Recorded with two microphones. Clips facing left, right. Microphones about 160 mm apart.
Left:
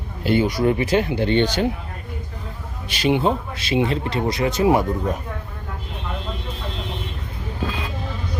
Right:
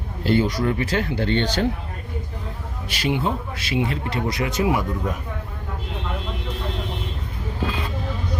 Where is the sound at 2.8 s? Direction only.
20° left (ahead or behind).